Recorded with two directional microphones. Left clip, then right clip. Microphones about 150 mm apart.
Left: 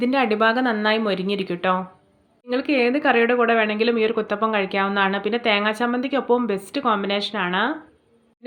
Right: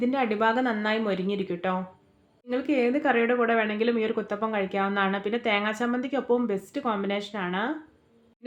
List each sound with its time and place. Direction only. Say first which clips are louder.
0.0 s speech: left 6 dB; 25° left (ahead or behind)